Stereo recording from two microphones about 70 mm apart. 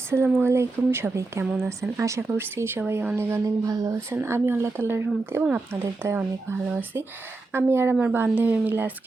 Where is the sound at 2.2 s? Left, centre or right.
Right.